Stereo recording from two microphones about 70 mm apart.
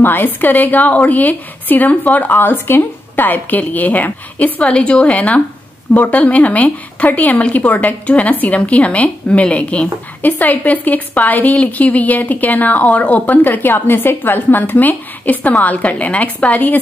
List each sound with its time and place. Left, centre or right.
0.0 s a woman's voice: left